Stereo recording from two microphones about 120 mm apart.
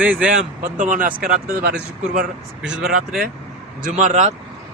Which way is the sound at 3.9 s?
75° right (ahead or behind).